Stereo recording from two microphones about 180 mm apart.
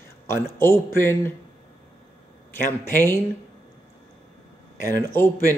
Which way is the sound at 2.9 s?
15° left (ahead or behind).